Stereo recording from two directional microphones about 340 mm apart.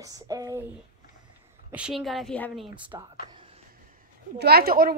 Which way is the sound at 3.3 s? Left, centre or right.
Centre.